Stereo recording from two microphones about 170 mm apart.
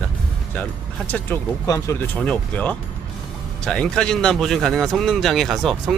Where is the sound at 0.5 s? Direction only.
10° left (ahead or behind).